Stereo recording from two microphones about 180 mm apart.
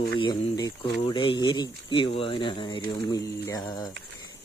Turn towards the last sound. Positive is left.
turn(degrees=20)  # may be behind; listen again after turning